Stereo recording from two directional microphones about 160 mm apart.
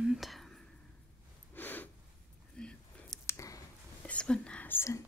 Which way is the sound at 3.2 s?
20° left (ahead or behind).